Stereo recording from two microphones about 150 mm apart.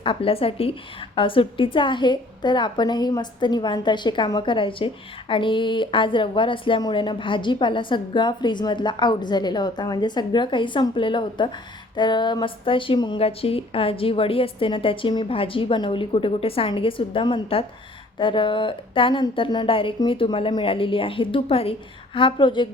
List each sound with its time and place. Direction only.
0.0 s speech: 35° left (ahead or behind)